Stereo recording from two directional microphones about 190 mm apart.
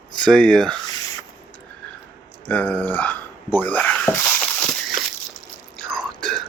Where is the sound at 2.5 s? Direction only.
10° left (ahead or behind).